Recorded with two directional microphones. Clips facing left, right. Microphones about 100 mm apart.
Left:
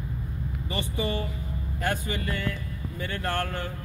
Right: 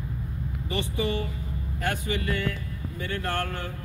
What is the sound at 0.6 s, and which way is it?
A man's voice, 35° left (ahead or behind).